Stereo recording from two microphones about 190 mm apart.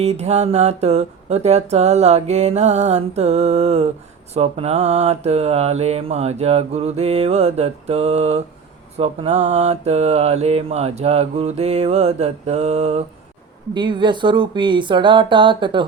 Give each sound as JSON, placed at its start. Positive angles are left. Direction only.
{"t": 0.0, "sound": "mantra", "side_deg": -35}
{"t": 13.7, "sound": "speech", "side_deg": -25}